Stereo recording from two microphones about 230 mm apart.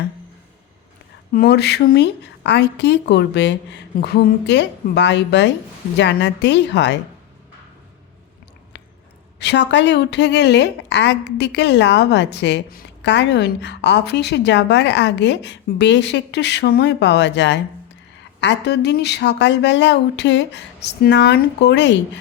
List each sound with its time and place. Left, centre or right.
1.3 s a woman's voice: left
9.4 s a woman's voice: left